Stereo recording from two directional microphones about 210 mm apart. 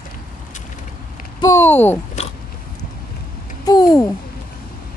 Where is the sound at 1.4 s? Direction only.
15° left (ahead or behind).